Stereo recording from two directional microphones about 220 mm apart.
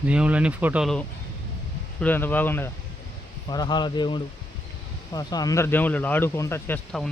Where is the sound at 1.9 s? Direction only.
10° left (ahead or behind).